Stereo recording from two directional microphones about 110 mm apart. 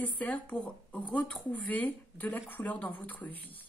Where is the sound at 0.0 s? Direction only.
15° left (ahead or behind).